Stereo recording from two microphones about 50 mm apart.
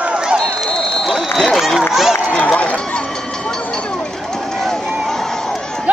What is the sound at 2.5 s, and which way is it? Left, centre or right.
Speech, left.